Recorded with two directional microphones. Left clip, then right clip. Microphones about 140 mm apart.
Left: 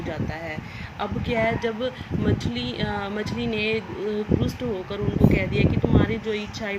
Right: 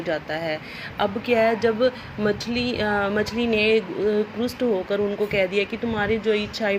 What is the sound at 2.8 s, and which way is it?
Speech, 35° right (ahead or behind).